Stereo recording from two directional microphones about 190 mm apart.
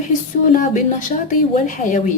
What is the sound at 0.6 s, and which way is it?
A woman's voice, 45° left (ahead or behind).